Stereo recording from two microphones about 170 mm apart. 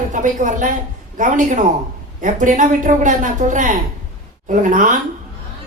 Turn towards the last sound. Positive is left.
turn(degrees=-50)  # may be behind; listen again after turning